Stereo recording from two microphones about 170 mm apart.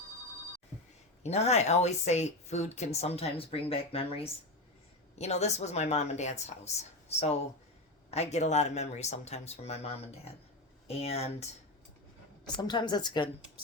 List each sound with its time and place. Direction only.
1.2 s a woman's voice: 40° left (ahead or behind)
12.6 s a woman's voice: 25° left (ahead or behind)